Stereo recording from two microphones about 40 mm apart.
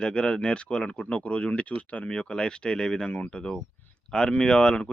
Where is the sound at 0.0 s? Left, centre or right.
Left.